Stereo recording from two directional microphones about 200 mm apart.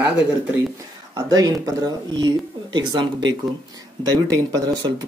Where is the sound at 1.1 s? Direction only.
15° right (ahead or behind).